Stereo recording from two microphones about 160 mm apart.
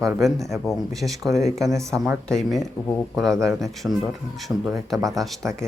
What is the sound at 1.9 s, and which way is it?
Speech, centre (ahead or behind).